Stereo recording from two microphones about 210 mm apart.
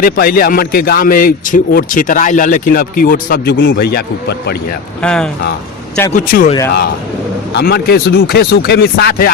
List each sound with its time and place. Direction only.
0.0 s a man's voice: 45° left (ahead or behind)
5.0 s speech: 5° left (ahead or behind)
6.1 s speech: 40° left (ahead or behind)
7.5 s a man's voice: 50° left (ahead or behind)